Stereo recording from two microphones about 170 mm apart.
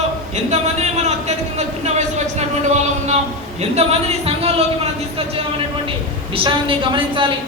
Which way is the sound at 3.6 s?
40° right (ahead or behind).